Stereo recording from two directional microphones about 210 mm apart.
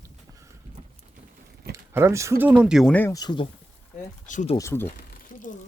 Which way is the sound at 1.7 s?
15° right (ahead or behind).